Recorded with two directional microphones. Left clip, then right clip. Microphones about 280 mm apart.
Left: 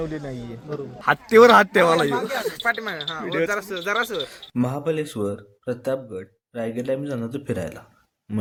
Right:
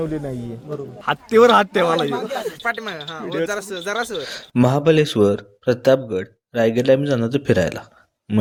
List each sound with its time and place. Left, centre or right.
0.0 s a man's voice: right
1.0 s a man's voice: centre
2.6 s speech: centre
3.2 s a man's voice: centre
3.5 s speech: centre
4.3 s speech: left